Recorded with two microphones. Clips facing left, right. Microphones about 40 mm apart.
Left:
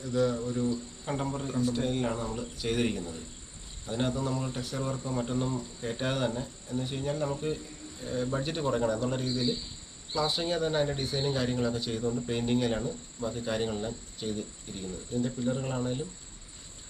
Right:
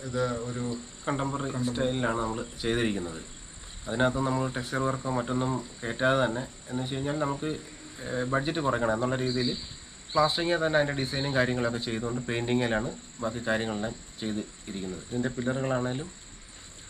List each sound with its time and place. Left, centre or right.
0.0 s speech: centre
0.3 s speech: right
5.2 s speech: centre